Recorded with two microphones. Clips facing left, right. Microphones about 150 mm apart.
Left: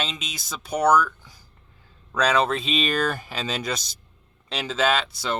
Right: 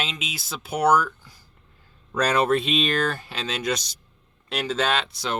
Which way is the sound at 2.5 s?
Centre (ahead or behind).